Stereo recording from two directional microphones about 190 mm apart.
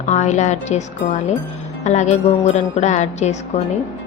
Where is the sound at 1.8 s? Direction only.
35° left (ahead or behind).